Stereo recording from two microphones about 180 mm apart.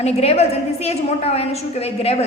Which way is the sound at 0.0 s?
35° left (ahead or behind).